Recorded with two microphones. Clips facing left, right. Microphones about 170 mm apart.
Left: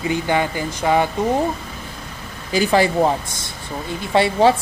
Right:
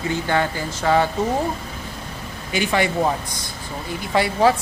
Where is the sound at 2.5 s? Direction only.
35° left (ahead or behind).